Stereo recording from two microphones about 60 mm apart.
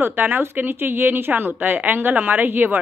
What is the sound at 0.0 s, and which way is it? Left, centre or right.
Speech, right.